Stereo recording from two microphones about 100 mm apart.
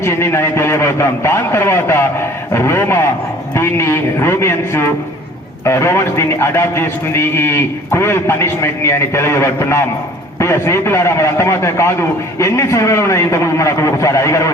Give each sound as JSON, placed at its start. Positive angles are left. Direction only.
{"t": 0.0, "sound": "a man's voice", "side_deg": 25}